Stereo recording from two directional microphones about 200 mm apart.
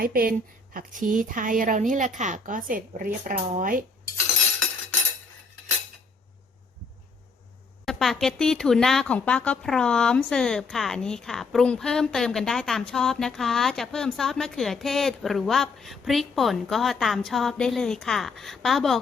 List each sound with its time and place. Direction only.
0.0 s a woman's voice: 45° right (ahead or behind)
7.9 s speech: centre (ahead or behind)